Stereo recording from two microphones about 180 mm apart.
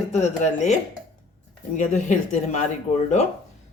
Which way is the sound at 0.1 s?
40° left (ahead or behind).